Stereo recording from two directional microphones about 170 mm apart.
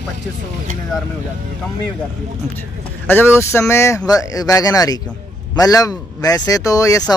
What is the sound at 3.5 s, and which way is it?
Speech, 15° left (ahead or behind).